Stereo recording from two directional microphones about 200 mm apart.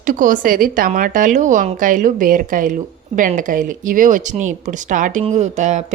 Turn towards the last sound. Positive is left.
turn(degrees=-35)  # may be behind; listen again after turning